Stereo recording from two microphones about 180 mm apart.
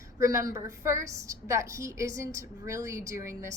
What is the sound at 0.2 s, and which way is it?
A woman's voice, 15° right (ahead or behind).